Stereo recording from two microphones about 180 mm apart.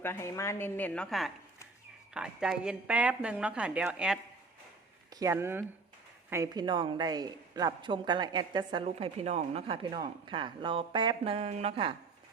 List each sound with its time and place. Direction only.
0.0 s a woman's voice: 15° left (ahead or behind); by 4.2 s 5° right (ahead or behind)
5.2 s a woman's voice: 15° right (ahead or behind); by 11.9 s 35° right (ahead or behind)